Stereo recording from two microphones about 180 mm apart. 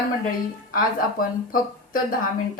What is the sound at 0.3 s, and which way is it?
Speech, 50° left (ahead or behind).